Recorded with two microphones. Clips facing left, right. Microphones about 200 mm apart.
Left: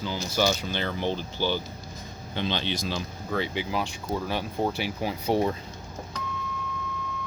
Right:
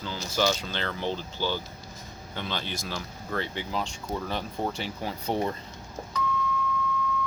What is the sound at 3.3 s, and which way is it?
Speech, 10° left (ahead or behind).